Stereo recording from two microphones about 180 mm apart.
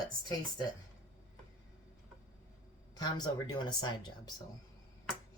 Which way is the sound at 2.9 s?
20° left (ahead or behind).